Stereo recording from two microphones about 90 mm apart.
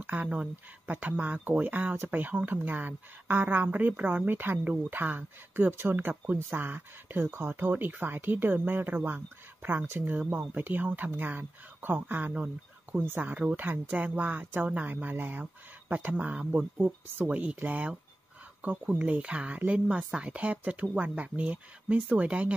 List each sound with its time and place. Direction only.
0.0 s speech: 20° right (ahead or behind)